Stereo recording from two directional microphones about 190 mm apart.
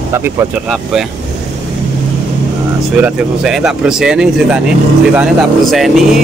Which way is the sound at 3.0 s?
5° right (ahead or behind).